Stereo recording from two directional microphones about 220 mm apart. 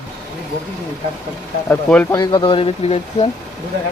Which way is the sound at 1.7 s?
5° left (ahead or behind).